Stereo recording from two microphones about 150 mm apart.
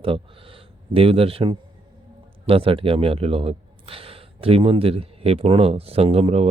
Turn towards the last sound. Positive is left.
turn(degrees=-45)  # may be behind; listen again after turning